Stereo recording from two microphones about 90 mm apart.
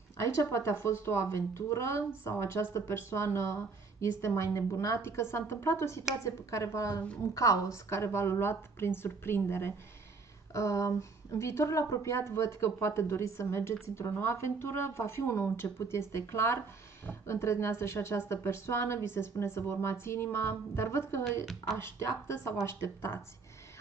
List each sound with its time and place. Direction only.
0.2 s a woman's voice: 35° left (ahead or behind)